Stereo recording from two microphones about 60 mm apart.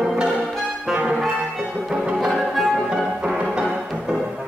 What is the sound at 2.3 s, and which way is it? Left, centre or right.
Music, centre.